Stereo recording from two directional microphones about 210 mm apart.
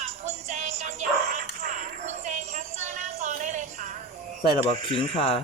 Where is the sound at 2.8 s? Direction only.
35° right (ahead or behind).